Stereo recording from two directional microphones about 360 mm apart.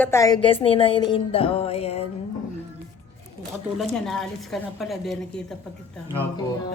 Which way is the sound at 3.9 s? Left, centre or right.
Centre.